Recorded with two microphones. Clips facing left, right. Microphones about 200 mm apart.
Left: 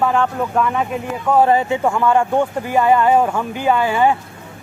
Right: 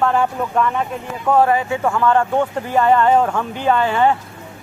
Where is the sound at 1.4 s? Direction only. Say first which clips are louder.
Left 2 dB; 25° left (ahead or behind).